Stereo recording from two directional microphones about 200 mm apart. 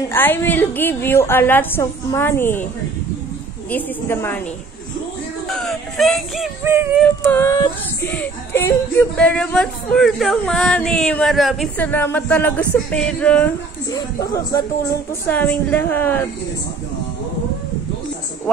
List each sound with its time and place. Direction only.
0.1 s a woman's voice: 10° left (ahead or behind)
3.7 s a woman's voice: 10° left (ahead or behind)
5.5 s speech: centre (ahead or behind)
6.6 s music: 10° right (ahead or behind)
7.2 s a woman's voice: 15° left (ahead or behind)
13.8 s a woman's voice: 15° left (ahead or behind)